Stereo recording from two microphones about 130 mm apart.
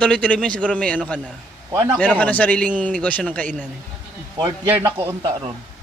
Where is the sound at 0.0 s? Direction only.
10° left (ahead or behind).